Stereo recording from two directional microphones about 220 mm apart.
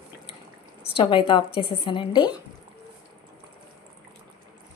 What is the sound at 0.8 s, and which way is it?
Speech, 25° left (ahead or behind).